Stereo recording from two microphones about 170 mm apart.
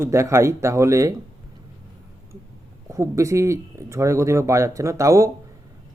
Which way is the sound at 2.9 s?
20° right (ahead or behind).